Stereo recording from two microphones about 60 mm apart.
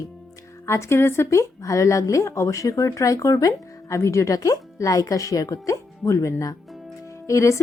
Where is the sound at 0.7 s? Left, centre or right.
Left.